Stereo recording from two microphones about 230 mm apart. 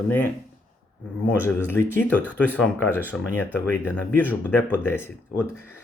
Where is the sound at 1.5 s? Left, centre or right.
Centre.